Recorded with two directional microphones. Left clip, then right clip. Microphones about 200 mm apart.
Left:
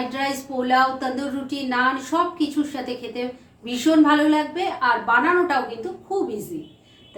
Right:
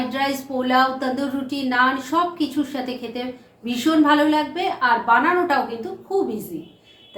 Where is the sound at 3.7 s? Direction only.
5° right (ahead or behind).